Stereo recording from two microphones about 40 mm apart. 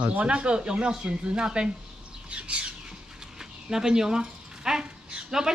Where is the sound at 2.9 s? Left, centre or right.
Centre.